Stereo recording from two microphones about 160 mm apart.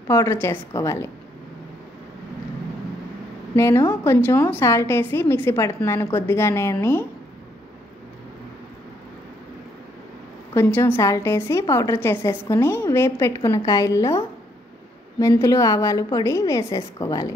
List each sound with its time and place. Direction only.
0.1 s a woman's voice: 15° left (ahead or behind)
3.5 s a woman's voice: 15° left (ahead or behind)
10.5 s a woman's voice: 15° left (ahead or behind)